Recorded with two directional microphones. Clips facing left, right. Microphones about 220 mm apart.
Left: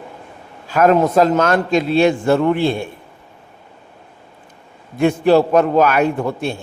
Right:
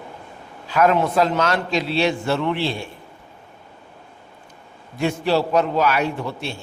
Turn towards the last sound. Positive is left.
turn(degrees=50)  # may be behind; listen again after turning